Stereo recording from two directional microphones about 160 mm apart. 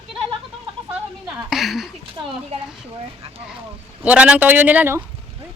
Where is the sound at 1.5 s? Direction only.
Centre (ahead or behind).